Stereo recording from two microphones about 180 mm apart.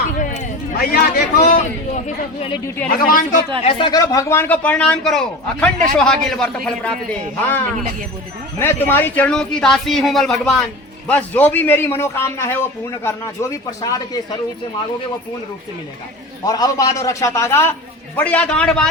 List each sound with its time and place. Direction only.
0.2 s a sound: 45° left (ahead or behind)
3.1 s speech: 50° left (ahead or behind)
3.6 s a man's voice: 30° left (ahead or behind)
16.4 s speech: 20° left (ahead or behind); by 18.9 s 5° left (ahead or behind)